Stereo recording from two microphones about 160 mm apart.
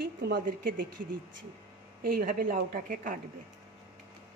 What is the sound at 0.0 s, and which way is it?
Speech, 75° right (ahead or behind).